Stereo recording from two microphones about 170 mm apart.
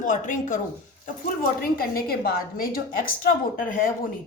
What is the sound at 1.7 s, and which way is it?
A woman's voice, 60° left (ahead or behind).